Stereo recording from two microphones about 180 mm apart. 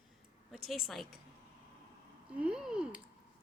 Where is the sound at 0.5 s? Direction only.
Centre (ahead or behind).